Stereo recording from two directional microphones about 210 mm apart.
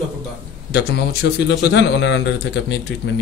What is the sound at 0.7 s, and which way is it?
A man's voice, 50° left (ahead or behind).